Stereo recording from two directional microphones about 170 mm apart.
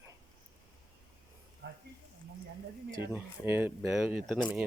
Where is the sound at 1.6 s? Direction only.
90° right.